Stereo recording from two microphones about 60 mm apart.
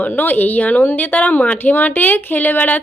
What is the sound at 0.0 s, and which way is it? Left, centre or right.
A woman's voice, left.